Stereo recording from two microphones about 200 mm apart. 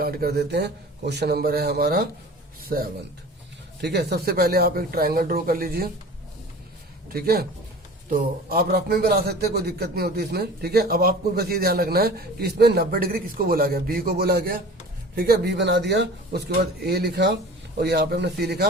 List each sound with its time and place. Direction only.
0.0 s a man's voice: 50° right (ahead or behind)
7.1 s a man's voice: 50° right (ahead or behind)